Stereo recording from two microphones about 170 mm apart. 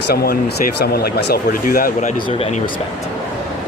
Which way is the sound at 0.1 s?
70° left (ahead or behind).